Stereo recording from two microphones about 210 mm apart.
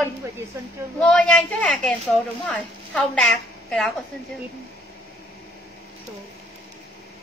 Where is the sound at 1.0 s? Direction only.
5° left (ahead or behind).